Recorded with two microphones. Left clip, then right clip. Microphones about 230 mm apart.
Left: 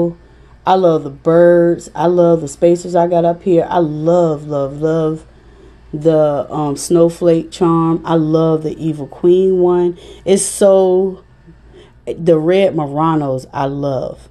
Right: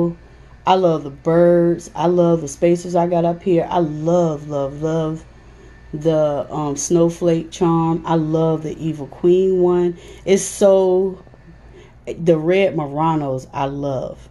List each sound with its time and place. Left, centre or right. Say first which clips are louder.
0.7 s speech: left 4 dB; centre